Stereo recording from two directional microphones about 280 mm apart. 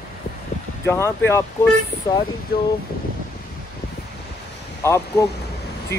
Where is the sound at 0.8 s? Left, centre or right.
Centre.